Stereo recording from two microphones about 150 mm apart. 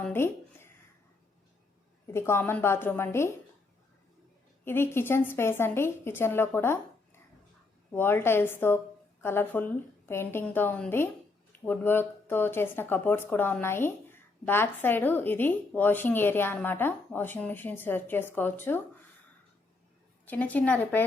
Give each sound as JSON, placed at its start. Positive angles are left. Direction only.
{"t": 0.0, "sound": "a woman's voice", "side_deg": 15}
{"t": 2.1, "sound": "speech", "side_deg": 15}
{"t": 4.6, "sound": "speech", "side_deg": 15}
{"t": 20.2, "sound": "speech", "side_deg": 10}